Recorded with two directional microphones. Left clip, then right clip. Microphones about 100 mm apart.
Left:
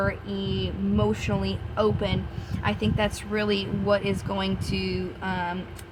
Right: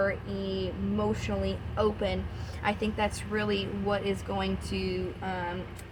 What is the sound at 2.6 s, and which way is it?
A woman's voice, 45° left (ahead or behind).